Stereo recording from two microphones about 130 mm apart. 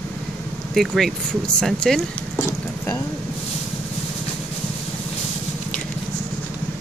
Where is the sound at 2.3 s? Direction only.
20° left (ahead or behind).